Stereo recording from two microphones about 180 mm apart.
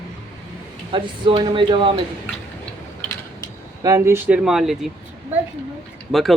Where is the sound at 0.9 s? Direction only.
25° right (ahead or behind).